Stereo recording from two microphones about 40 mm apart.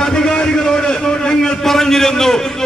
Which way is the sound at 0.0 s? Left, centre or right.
Centre.